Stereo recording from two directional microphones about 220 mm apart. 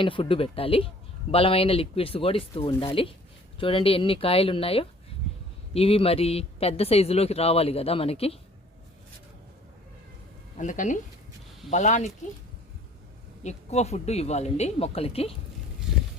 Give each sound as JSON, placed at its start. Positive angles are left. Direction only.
{"t": 0.0, "sound": "speech", "side_deg": 25}
{"t": 10.6, "sound": "speech", "side_deg": 35}
{"t": 13.4, "sound": "speech", "side_deg": 30}
{"t": 15.9, "sound": "a sound", "side_deg": -5}